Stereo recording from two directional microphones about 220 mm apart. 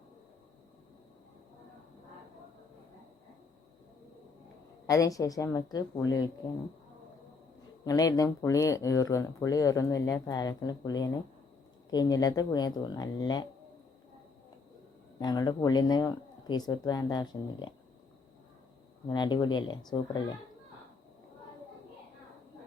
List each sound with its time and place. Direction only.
4.9 s speech: 15° left (ahead or behind)
7.9 s speech: 15° left (ahead or behind)
15.2 s speech: 20° left (ahead or behind)
19.0 s speech: 20° left (ahead or behind)